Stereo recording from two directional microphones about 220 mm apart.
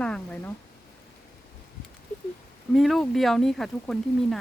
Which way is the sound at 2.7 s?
Centre (ahead or behind).